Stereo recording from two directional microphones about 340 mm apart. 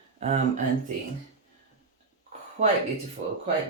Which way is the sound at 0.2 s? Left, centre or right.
Centre.